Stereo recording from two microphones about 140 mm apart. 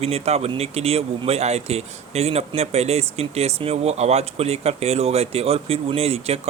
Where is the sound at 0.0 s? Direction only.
45° right (ahead or behind).